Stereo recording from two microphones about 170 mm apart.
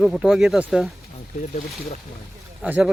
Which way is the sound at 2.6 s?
10° right (ahead or behind).